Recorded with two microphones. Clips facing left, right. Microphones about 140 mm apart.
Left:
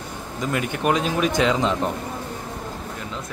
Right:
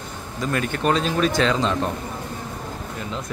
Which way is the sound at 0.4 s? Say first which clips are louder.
Right 1 dB; 15° left (ahead or behind).